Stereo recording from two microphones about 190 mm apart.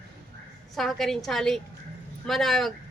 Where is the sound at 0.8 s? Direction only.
Centre (ahead or behind).